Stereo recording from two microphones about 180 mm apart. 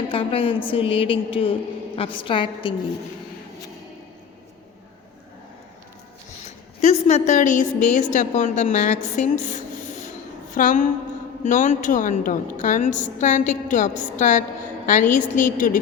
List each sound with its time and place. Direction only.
0.1 s a woman's voice: 30° left (ahead or behind)
6.8 s a woman's voice: 35° left (ahead or behind)
9.3 s a sound: 40° left (ahead or behind)
10.5 s a woman's voice: 45° left (ahead or behind)